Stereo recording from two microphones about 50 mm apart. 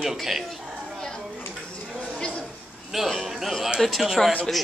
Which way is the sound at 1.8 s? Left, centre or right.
Centre.